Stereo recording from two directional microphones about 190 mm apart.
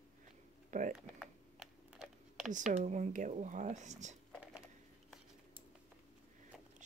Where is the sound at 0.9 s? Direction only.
5° right (ahead or behind).